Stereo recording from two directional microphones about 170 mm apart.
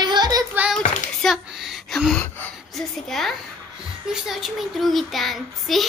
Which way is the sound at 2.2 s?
5° left (ahead or behind).